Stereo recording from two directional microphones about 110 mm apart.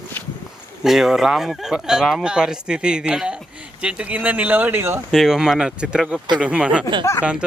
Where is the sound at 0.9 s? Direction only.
Centre (ahead or behind); by 4.9 s 20° right (ahead or behind).